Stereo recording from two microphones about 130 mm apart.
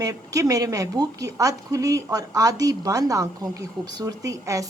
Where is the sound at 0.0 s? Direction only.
25° right (ahead or behind).